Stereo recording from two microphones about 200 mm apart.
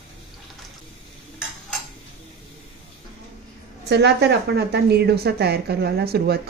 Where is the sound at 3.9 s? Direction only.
55° right (ahead or behind).